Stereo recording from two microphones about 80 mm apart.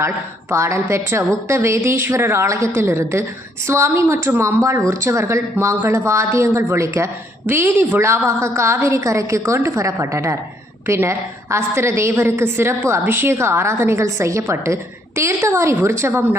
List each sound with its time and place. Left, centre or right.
0.5 s speech: right